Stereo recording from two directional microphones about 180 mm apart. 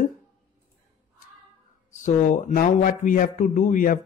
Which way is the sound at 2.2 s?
45° left (ahead or behind).